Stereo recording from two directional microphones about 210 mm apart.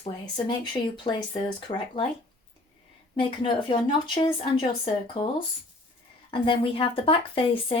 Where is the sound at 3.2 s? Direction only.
25° left (ahead or behind).